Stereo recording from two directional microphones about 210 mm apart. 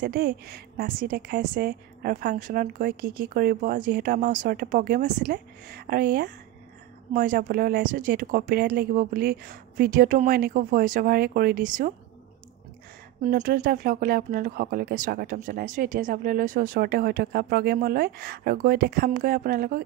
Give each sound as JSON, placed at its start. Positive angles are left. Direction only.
{"t": 0.0, "sound": "speech", "side_deg": -45}
{"t": 13.2, "sound": "speech", "side_deg": -40}